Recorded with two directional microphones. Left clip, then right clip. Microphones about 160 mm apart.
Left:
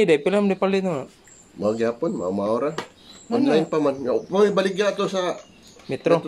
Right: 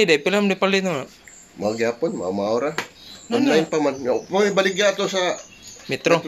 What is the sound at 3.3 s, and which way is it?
Speech, 10° left (ahead or behind).